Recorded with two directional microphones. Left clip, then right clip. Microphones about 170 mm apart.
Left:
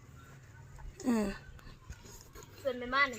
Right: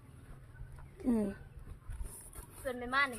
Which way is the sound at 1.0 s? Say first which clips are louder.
Left 1 dB; 10° right (ahead or behind).